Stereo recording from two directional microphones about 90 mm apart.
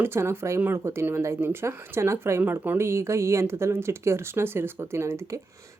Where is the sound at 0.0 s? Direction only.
30° right (ahead or behind).